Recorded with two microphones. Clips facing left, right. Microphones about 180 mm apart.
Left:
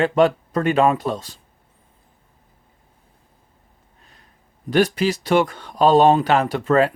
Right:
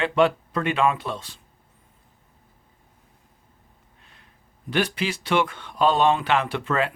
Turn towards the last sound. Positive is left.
turn(degrees=40)  # may be behind; listen again after turning